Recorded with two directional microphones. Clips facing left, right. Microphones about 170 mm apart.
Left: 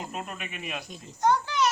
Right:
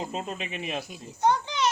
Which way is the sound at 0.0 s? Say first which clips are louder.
Right 4 dB; 30° right (ahead or behind).